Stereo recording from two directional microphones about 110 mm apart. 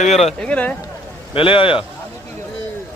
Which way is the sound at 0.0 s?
75° left (ahead or behind).